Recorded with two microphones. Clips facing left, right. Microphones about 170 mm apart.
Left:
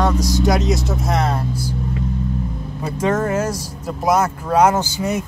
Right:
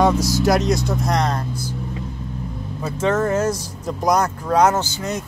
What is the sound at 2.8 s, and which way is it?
Speech, 10° left (ahead or behind).